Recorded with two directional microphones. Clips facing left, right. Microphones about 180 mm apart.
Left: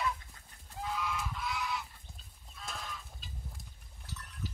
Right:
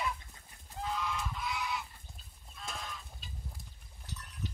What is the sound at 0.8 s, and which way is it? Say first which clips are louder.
Goose: even; 5° left (ahead or behind).